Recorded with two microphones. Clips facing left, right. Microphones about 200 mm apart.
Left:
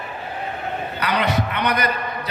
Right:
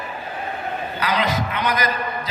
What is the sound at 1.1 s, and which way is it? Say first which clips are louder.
Speech: left 1 dB; 60° left (ahead or behind).